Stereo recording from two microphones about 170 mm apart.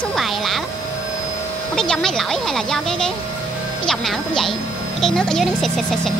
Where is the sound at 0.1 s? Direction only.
Centre (ahead or behind).